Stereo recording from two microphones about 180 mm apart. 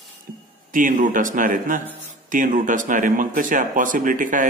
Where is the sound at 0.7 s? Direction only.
45° right (ahead or behind).